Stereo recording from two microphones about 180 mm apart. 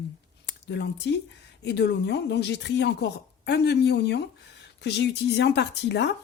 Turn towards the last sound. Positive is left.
turn(degrees=75)  # may be behind; listen again after turning